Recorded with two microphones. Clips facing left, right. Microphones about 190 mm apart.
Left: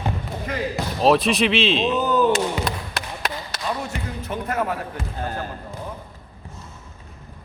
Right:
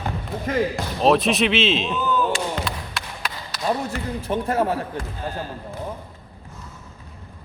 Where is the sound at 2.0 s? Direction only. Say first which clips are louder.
Left 4 dB; 40° left (ahead or behind).